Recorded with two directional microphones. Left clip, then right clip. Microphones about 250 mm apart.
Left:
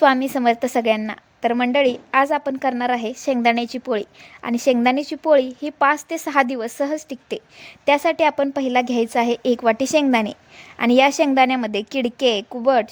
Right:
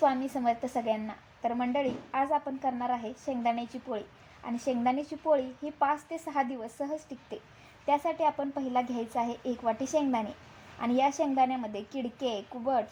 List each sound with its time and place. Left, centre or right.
0.0 s a woman's voice: left